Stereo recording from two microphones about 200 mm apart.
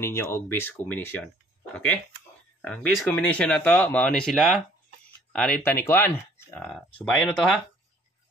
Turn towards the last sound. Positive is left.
turn(degrees=0)  # may be behind; listen again after turning